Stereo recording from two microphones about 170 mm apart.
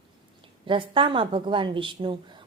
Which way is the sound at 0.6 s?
30° right (ahead or behind).